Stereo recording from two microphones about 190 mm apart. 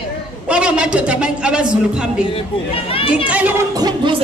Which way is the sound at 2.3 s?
30° left (ahead or behind).